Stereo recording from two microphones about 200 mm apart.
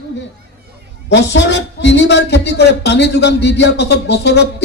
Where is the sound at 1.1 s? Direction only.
60° left (ahead or behind).